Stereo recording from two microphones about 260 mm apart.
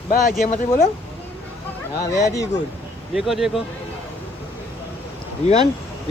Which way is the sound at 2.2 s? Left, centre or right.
Centre.